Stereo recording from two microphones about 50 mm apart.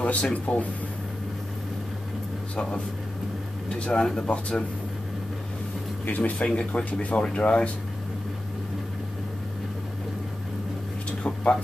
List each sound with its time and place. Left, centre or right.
0.0 s speech: left
2.5 s speech: centre
6.0 s speech: left
11.1 s a sound: left